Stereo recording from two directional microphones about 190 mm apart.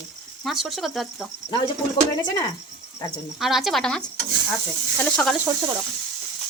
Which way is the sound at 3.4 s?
Centre (ahead or behind).